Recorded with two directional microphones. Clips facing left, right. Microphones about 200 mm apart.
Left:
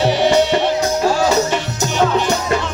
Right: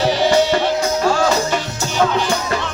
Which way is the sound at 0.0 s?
20° left (ahead or behind).